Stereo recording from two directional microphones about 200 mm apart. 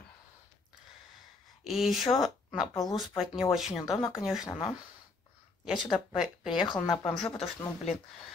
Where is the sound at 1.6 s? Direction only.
Centre (ahead or behind).